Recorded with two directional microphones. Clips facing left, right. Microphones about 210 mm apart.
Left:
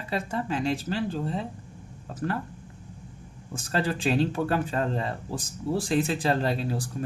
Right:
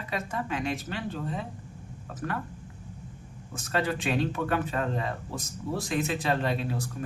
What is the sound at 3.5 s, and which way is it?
Speech, 30° left (ahead or behind).